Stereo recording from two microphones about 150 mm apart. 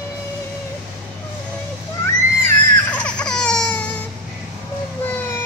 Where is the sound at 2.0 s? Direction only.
15° left (ahead or behind).